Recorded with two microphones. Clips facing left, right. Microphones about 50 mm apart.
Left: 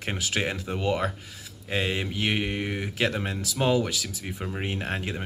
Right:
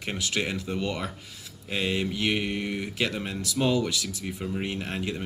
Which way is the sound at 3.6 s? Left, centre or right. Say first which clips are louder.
Left 1 dB; left.